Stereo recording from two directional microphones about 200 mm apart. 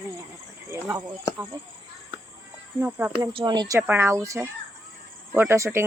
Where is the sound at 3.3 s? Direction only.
20° right (ahead or behind).